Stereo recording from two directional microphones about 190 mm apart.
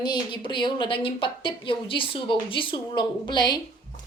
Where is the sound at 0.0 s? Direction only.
25° left (ahead or behind).